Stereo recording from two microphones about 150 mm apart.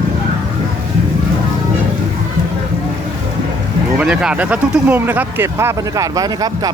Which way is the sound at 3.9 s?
5° right (ahead or behind).